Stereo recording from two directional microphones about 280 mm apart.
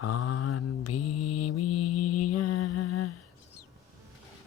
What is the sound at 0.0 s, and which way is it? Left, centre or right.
Mantra, left.